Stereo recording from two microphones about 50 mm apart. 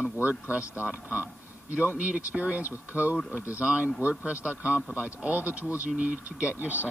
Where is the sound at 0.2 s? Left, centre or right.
Right.